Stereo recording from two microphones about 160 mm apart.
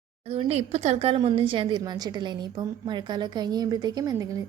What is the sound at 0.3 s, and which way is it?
A woman's voice, 40° right (ahead or behind).